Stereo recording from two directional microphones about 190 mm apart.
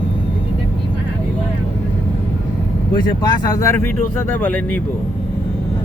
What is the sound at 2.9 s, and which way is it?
Speech, 20° left (ahead or behind).